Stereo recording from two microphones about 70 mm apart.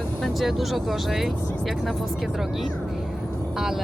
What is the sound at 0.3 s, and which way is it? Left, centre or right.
Speech, centre.